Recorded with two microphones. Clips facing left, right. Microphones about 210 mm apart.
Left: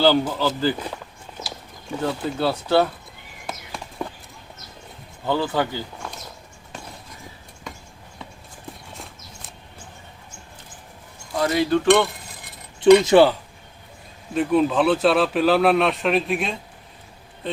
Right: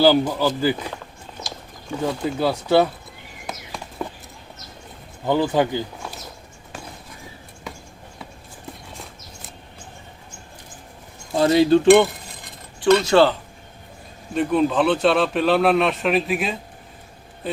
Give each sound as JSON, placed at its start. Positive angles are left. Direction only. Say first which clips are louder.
{"t": 0.0, "sound": "speech", "louder": "right 2 dB", "side_deg": -10}
{"t": 2.0, "sound": "speech", "louder": "right 1 dB", "side_deg": -10}
{"t": 3.4, "sound": "horse", "louder": "even", "side_deg": 0}
{"t": 5.2, "sound": "speech", "louder": "right 3 dB", "side_deg": -15}
{"t": 11.3, "sound": "speech", "louder": "right 5 dB", "side_deg": -25}
{"t": 12.8, "sound": "speech", "louder": "left 3 dB", "side_deg": 15}
{"t": 14.3, "sound": "speech", "louder": "even", "side_deg": 0}